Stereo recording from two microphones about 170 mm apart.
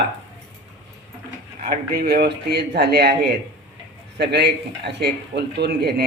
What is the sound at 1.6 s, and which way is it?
A man's voice, 60° right (ahead or behind).